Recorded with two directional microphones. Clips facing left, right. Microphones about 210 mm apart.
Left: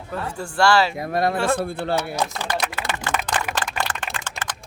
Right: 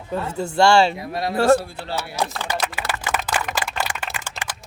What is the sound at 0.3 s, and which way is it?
Speech, 25° right (ahead or behind).